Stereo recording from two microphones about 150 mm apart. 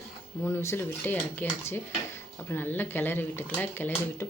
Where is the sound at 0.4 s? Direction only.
15° left (ahead or behind).